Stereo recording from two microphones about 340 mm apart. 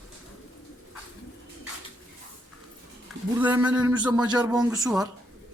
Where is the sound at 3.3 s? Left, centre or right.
Centre.